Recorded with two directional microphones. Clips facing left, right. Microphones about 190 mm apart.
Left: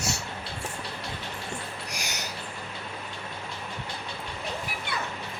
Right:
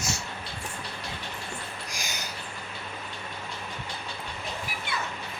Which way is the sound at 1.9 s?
70° left (ahead or behind).